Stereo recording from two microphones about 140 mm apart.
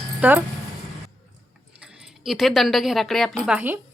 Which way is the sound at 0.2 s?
10° right (ahead or behind).